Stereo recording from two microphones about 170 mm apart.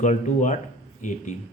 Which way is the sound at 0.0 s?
45° left (ahead or behind).